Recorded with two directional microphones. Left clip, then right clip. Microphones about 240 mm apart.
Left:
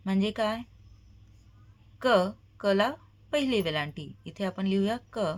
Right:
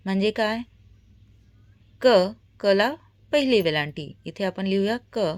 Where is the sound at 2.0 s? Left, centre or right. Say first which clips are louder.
Right 6 dB; right.